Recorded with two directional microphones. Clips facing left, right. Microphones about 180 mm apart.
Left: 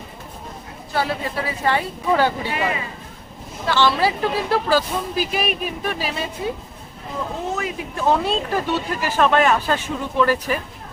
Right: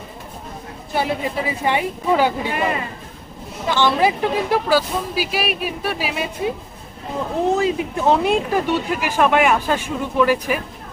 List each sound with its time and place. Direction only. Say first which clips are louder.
0.9 s speech: right 2 dB; 20° right (ahead or behind)
2.5 s speech: right 2 dB; 50° right (ahead or behind)
3.7 s speech: right 1 dB; 15° right (ahead or behind)
7.5 s speech: right 7 dB; 25° right (ahead or behind)